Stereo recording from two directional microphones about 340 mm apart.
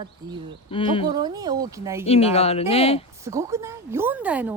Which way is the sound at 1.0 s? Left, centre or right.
Centre.